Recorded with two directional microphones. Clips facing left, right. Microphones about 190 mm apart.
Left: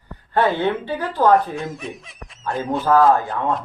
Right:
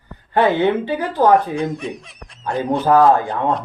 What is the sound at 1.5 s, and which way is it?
Speech, centre (ahead or behind).